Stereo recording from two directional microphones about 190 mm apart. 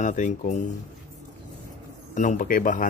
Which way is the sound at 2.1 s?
40° left (ahead or behind).